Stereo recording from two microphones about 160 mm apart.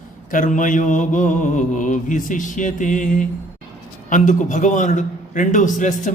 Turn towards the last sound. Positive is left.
turn(degrees=55)  # may be behind; listen again after turning